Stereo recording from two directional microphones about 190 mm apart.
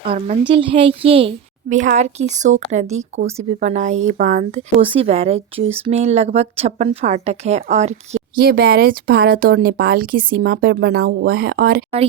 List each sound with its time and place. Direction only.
0.1 s a woman's voice: 30° right (ahead or behind)
8.4 s speech: 55° right (ahead or behind)